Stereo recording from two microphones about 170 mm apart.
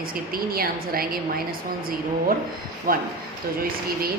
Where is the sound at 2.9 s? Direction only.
60° right (ahead or behind).